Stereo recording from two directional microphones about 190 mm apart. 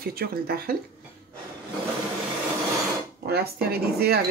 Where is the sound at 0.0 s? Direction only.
50° right (ahead or behind).